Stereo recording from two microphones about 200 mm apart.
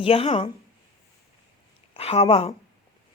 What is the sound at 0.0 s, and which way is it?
Speech, 30° left (ahead or behind).